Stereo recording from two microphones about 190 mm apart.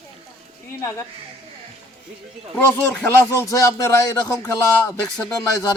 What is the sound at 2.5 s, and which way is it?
Speech, 10° left (ahead or behind).